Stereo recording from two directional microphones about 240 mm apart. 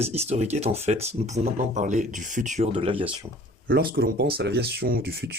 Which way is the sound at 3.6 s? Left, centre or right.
Right.